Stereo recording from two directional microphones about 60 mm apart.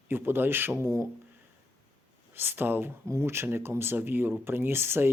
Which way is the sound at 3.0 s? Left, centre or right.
Right.